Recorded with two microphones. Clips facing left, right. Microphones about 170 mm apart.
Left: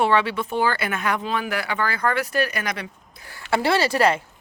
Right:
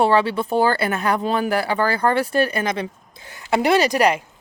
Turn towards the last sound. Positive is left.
turn(degrees=-15)  # may be behind; listen again after turning